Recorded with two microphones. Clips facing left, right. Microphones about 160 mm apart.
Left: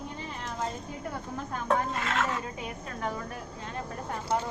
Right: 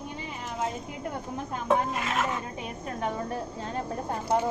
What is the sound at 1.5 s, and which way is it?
Speech, 15° right (ahead or behind).